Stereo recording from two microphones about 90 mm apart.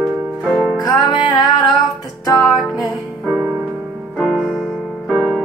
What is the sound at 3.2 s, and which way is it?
Music, centre (ahead or behind).